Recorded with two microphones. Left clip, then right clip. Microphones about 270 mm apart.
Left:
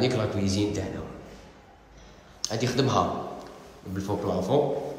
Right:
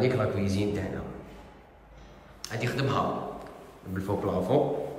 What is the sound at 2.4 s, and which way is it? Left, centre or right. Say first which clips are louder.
A man's voice: left 4 dB; centre.